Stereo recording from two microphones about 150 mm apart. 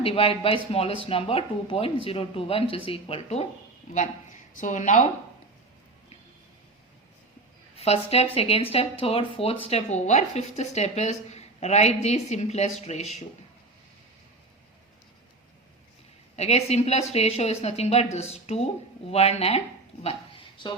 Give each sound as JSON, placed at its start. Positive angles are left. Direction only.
{"t": 0.0, "sound": "speech", "side_deg": 40}
{"t": 3.9, "sound": "speech", "side_deg": 55}
{"t": 7.8, "sound": "speech", "side_deg": 45}
{"t": 16.3, "sound": "speech", "side_deg": 45}